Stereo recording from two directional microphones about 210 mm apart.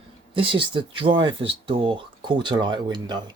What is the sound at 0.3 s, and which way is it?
Speech, 25° right (ahead or behind).